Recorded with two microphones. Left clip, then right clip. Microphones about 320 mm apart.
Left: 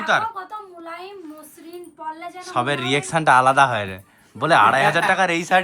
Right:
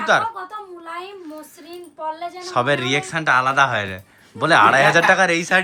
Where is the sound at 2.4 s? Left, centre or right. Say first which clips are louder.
Right 3 dB; centre.